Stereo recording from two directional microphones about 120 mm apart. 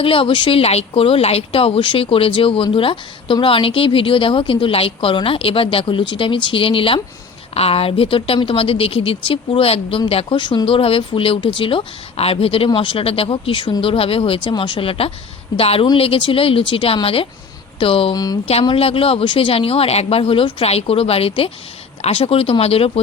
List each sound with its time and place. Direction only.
0.0 s speech: 50° left (ahead or behind)
18.1 s speech: 35° left (ahead or behind)
18.6 s speech: 50° left (ahead or behind)